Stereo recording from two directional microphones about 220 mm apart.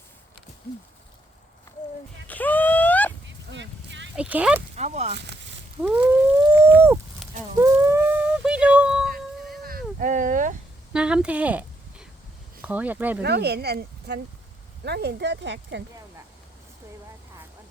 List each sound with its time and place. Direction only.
2.2 s a sound: 5° left (ahead or behind)
3.2 s vehicle: 55° right (ahead or behind)
4.1 s speech: 5° right (ahead or behind)
4.7 s speech: 30° right (ahead or behind)
5.1 s speech: 50° right (ahead or behind)
5.8 s speech: 15° right (ahead or behind)
6.4 s a sound: 10° right (ahead or behind)
10.0 s speech: 35° right (ahead or behind)
10.9 s a woman's voice: 5° right (ahead or behind)
13.2 s speech: 50° right (ahead or behind)